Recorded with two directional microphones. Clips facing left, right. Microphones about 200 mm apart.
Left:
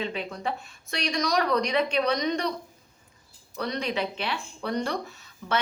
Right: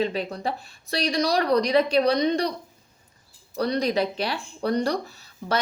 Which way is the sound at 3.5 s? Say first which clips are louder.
Right 6 dB; 35° right (ahead or behind).